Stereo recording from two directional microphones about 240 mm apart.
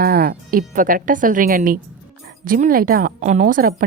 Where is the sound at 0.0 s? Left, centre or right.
Right.